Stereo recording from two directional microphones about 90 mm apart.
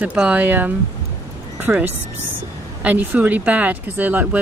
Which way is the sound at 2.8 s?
20° right (ahead or behind).